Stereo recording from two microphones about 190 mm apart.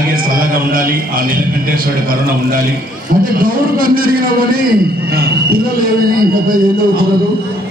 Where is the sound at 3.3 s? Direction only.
45° right (ahead or behind).